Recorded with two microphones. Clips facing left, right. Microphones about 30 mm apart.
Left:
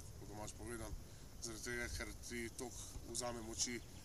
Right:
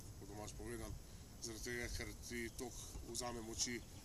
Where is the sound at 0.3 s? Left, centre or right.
Centre.